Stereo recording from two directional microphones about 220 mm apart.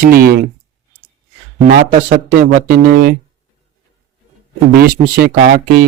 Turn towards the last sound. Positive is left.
turn(degrees=-45)  # may be behind; listen again after turning